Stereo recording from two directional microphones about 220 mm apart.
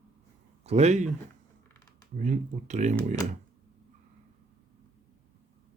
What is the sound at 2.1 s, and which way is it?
Speech, 35° right (ahead or behind).